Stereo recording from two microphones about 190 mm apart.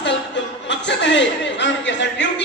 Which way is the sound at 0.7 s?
70° left (ahead or behind).